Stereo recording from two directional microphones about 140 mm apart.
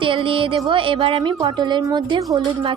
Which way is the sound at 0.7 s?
40° right (ahead or behind).